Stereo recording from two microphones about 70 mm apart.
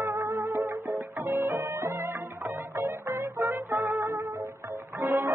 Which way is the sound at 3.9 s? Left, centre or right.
Right.